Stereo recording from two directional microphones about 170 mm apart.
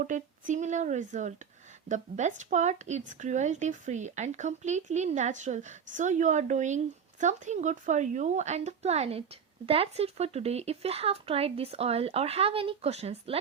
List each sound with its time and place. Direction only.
0.0 s a woman's voice: 50° right (ahead or behind)